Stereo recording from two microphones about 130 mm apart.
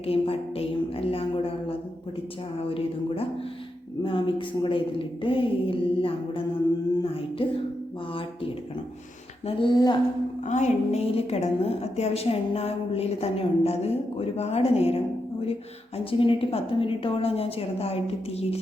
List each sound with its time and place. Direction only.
0.0 s a woman's voice: 50° left (ahead or behind)
4.0 s a woman's voice: 40° left (ahead or behind)
9.5 s a woman's voice: 40° left (ahead or behind)
10.4 s a woman's voice: 65° left (ahead or behind)